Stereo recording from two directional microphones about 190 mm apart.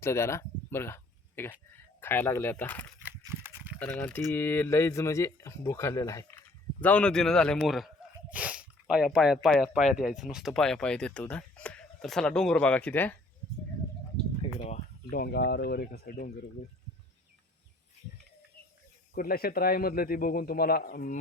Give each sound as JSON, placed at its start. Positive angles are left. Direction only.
{"t": 0.0, "sound": "a sound", "side_deg": 15}
{"t": 2.0, "sound": "speech", "side_deg": 10}
{"t": 3.0, "sound": "pig", "side_deg": -10}
{"t": 3.8, "sound": "speech", "side_deg": 10}
{"t": 14.4, "sound": "a sound", "side_deg": 35}
{"t": 15.1, "sound": "speech", "side_deg": 55}
{"t": 19.1, "sound": "a man's voice", "side_deg": 50}